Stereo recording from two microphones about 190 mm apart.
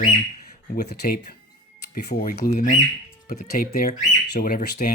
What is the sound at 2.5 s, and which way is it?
Speech, 40° left (ahead or behind).